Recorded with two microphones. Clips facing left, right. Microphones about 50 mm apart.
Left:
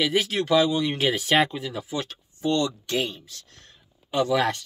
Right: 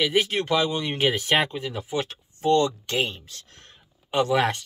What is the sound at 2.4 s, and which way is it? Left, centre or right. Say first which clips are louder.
Speech: right 4 dB; right.